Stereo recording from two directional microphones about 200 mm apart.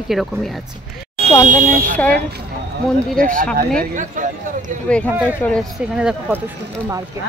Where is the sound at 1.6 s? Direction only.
40° right (ahead or behind).